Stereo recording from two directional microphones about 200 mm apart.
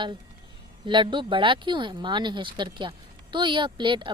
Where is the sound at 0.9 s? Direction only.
25° right (ahead or behind).